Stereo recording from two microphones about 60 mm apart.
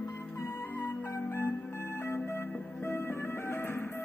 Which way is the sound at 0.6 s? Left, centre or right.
Left.